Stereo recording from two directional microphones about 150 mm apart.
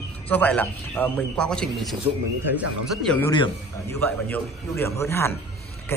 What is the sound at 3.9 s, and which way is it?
A man's voice, 15° left (ahead or behind).